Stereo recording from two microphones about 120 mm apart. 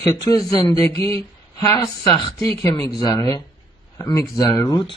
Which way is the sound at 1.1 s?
25° left (ahead or behind).